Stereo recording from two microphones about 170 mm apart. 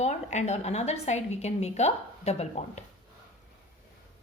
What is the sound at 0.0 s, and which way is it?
A woman's voice, 45° left (ahead or behind).